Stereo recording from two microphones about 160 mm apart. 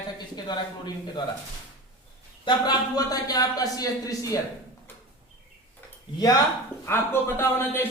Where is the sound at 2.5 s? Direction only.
25° left (ahead or behind).